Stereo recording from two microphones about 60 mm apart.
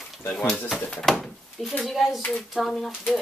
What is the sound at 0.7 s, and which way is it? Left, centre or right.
Speech, centre.